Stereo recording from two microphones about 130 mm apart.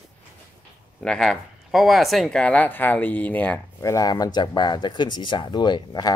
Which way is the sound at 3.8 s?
25° left (ahead or behind).